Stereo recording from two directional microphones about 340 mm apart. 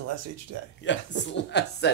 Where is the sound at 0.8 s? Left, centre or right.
Left.